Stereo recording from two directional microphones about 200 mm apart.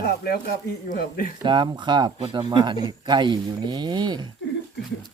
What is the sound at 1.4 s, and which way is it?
Speech, 25° right (ahead or behind).